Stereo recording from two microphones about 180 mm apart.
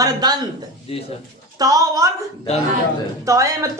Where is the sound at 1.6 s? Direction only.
20° right (ahead or behind).